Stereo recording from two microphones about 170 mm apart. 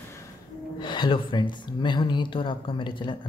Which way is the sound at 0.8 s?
25° left (ahead or behind).